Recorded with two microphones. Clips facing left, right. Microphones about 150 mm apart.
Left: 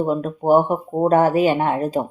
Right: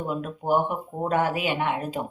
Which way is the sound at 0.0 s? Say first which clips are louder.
Left 9 dB; 40° left (ahead or behind).